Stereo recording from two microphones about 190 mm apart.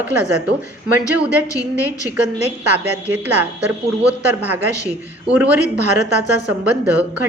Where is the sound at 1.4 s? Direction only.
15° left (ahead or behind).